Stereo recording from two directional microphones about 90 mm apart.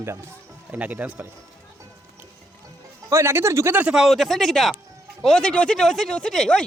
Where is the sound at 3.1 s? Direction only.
30° right (ahead or behind).